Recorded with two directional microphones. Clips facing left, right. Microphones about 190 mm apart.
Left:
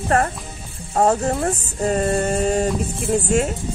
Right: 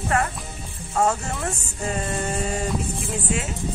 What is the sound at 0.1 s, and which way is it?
Music, 40° left (ahead or behind).